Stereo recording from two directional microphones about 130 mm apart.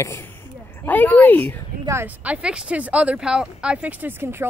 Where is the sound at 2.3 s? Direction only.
10° right (ahead or behind).